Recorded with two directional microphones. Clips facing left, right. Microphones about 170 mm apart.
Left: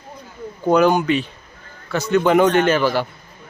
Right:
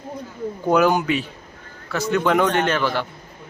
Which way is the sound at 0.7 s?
5° right (ahead or behind).